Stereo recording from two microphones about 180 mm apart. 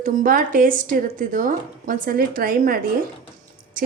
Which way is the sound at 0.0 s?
50° right (ahead or behind).